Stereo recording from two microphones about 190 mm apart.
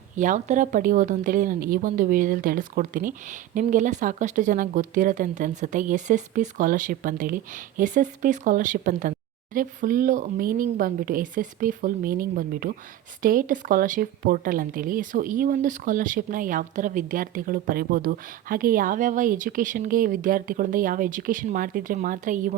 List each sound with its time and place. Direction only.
0.2 s speech: 40° right (ahead or behind)